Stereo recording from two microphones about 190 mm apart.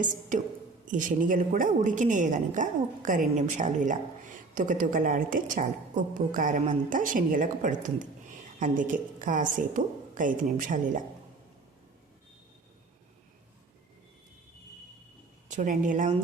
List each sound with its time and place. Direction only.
0.0 s a woman's voice: 40° right (ahead or behind)
15.4 s a woman's voice: 40° right (ahead or behind)